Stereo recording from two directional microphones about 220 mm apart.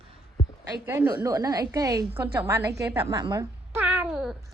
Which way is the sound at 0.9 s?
10° right (ahead or behind).